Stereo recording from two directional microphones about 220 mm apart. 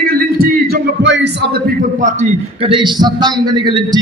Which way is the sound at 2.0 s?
30° right (ahead or behind).